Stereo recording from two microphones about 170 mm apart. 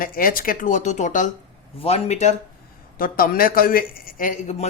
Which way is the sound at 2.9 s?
60° left (ahead or behind).